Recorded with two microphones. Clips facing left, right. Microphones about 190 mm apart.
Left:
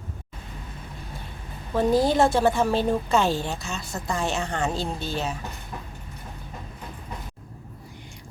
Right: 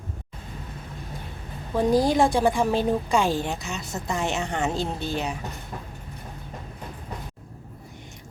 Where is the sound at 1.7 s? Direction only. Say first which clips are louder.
Even; 15° right (ahead or behind).